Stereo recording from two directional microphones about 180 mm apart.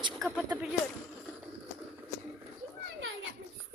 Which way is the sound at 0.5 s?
5° right (ahead or behind).